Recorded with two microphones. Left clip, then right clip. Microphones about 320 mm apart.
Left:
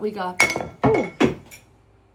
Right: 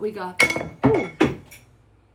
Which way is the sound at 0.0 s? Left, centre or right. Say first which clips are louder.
Left 1 dB; centre.